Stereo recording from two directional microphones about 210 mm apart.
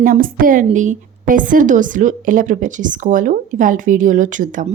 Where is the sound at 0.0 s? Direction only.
40° right (ahead or behind).